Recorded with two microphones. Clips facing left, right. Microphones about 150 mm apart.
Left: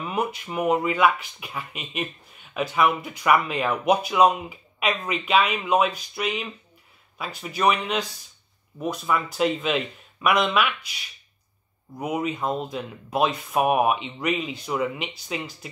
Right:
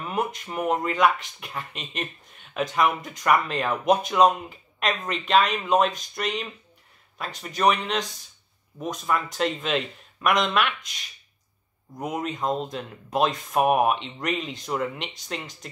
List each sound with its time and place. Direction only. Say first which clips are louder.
0.0 s speech: left 1 dB; centre (ahead or behind)